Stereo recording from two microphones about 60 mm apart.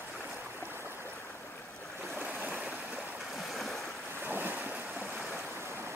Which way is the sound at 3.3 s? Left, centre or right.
Centre.